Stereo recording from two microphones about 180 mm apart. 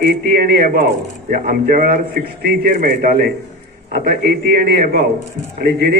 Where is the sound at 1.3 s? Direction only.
50° right (ahead or behind).